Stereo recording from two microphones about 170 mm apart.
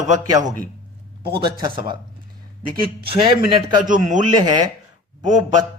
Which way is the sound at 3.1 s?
30° right (ahead or behind).